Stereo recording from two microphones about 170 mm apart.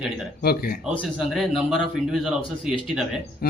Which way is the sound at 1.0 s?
Centre (ahead or behind).